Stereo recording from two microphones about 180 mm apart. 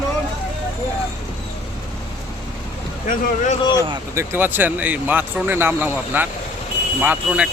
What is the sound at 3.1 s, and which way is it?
Speech, 45° left (ahead or behind).